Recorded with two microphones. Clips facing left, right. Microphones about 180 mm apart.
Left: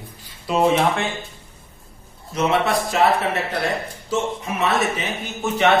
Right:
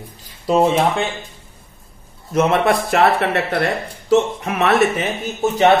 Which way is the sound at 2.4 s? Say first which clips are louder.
Right 4 dB; 55° right (ahead or behind).